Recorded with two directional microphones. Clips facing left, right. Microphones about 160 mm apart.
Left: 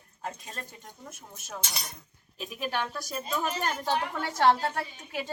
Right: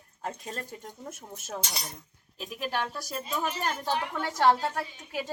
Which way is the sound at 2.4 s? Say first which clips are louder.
Even; centre (ahead or behind).